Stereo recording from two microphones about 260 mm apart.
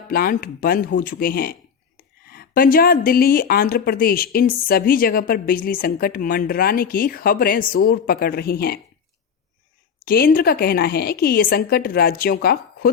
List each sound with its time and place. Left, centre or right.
0.1 s speech: left
10.1 s speech: left